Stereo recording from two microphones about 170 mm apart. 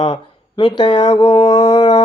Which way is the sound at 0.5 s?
30° left (ahead or behind).